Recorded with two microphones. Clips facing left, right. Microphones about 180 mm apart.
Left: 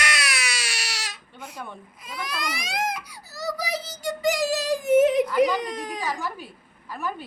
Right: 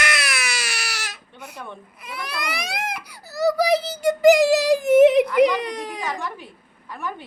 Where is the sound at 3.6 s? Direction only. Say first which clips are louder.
Right 10 dB; 65° right (ahead or behind).